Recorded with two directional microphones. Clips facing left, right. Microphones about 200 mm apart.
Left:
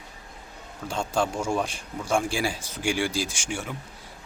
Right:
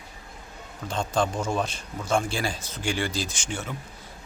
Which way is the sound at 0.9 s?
10° left (ahead or behind).